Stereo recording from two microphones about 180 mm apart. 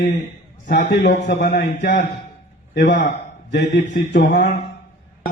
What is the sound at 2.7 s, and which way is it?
A man's voice, 70° left (ahead or behind).